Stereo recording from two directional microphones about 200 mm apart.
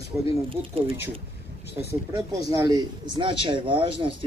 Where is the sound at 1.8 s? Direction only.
15° right (ahead or behind).